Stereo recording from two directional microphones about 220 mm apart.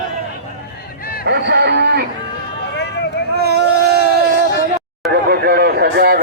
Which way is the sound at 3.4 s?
45° right (ahead or behind).